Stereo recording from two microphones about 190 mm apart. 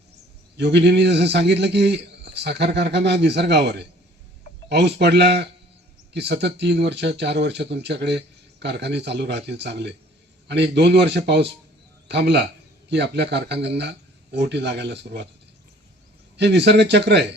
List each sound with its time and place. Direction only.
0.5 s speech: 65° right (ahead or behind)
16.4 s speech: 65° right (ahead or behind)